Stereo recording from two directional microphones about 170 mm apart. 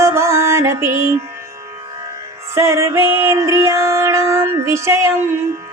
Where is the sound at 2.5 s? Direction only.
15° right (ahead or behind).